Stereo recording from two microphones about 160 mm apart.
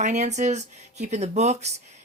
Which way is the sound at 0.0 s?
45° right (ahead or behind).